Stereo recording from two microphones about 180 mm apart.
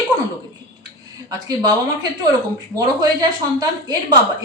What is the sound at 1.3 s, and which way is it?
Speech, 20° right (ahead or behind).